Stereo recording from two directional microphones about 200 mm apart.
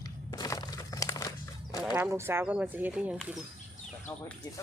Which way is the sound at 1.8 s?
Centre (ahead or behind).